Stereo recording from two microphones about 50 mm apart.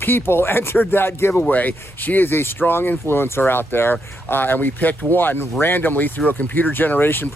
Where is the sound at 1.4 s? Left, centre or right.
Left.